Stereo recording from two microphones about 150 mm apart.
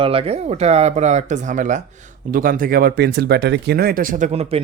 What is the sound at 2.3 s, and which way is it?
Speech, 65° right (ahead or behind).